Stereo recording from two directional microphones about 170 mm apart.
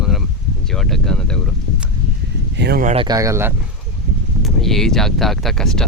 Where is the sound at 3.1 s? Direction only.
20° right (ahead or behind).